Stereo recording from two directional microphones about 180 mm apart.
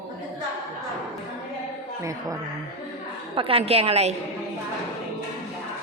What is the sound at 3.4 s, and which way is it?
Speech, 30° right (ahead or behind).